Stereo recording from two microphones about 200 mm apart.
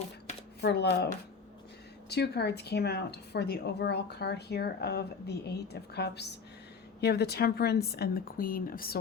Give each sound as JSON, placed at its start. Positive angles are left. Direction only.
{"t": 0.6, "sound": "a woman's voice", "side_deg": 55}